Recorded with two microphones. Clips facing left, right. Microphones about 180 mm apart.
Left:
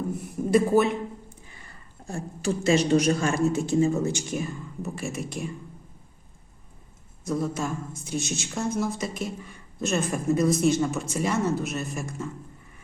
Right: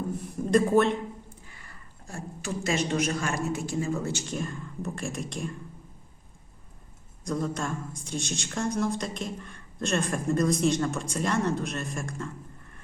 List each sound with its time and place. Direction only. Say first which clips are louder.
0.4 s speech: left 1 dB; 5° left (ahead or behind)
2.0 s a woman's voice: left 7 dB; 30° left (ahead or behind); by 5.5 s 5° left (ahead or behind)
7.3 s a woman's voice: left 2 dB; 5° left (ahead or behind)